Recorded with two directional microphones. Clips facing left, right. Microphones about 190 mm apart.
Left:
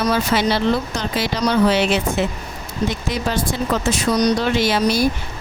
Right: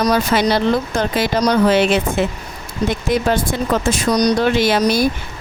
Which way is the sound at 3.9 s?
45° right (ahead or behind).